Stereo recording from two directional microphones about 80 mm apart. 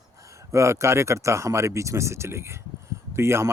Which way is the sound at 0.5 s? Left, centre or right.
Right.